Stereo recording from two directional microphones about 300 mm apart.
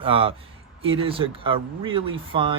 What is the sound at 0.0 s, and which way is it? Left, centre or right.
Speech, centre.